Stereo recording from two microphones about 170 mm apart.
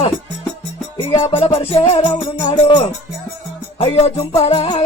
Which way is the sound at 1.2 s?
35° left (ahead or behind).